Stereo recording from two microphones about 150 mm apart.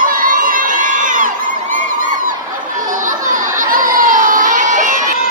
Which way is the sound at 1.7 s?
65° right (ahead or behind).